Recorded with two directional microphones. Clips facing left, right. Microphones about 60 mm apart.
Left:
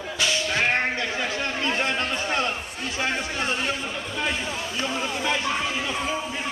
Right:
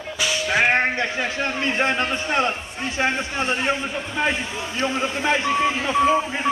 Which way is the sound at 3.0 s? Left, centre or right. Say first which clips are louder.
Right 4 dB; right.